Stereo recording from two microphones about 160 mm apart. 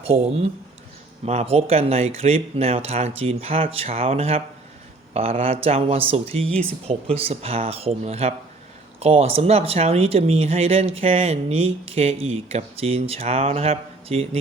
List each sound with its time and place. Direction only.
0.0 s speech: 40° right (ahead or behind)